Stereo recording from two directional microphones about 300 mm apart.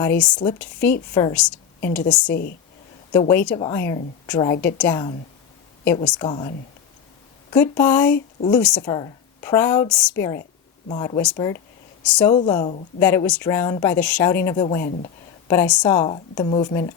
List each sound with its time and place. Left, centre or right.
0.0 s a woman's voice: centre
2.3 s speech: left
3.1 s a woman's voice: centre
6.1 s a woman's voice: centre
7.5 s a woman's voice: centre
12.3 s a woman's voice: centre
14.8 s speech: left
15.4 s a woman's voice: centre